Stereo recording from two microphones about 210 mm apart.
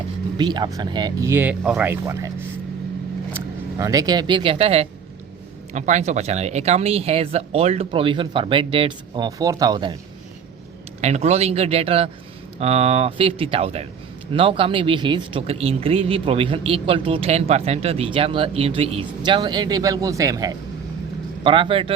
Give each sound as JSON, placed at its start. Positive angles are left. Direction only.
{"t": 0.3, "sound": "speech", "side_deg": -20}
{"t": 3.3, "sound": "speech", "side_deg": -15}
{"t": 11.0, "sound": "speech", "side_deg": -30}